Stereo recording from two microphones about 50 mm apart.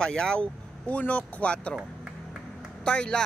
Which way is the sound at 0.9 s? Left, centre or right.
Left.